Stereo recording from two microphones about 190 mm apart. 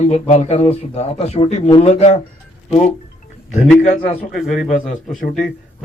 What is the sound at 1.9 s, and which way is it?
A man's voice, 35° left (ahead or behind).